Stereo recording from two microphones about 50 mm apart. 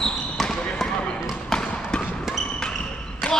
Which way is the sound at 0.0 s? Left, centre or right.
Centre.